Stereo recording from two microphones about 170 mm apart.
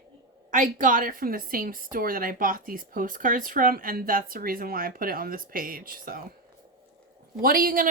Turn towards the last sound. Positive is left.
turn(degrees=-55)  # may be behind; listen again after turning